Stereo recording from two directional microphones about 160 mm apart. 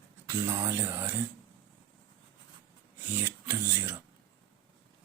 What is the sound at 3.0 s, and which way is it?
Music, 15° right (ahead or behind).